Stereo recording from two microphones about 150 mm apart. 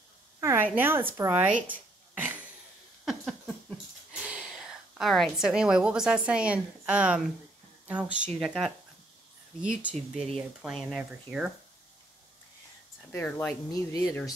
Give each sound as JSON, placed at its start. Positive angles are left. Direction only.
{"t": 0.4, "sound": "a sound", "side_deg": -20}
{"t": 0.7, "sound": "a woman's voice", "side_deg": -15}
{"t": 1.7, "sound": "a sound", "side_deg": -10}
{"t": 7.9, "sound": "a woman's voice", "side_deg": -10}
{"t": 13.1, "sound": "speech", "side_deg": 10}
{"t": 13.7, "sound": "speech", "side_deg": 25}